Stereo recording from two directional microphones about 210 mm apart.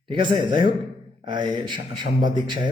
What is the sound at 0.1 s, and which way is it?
A man's voice, 20° right (ahead or behind).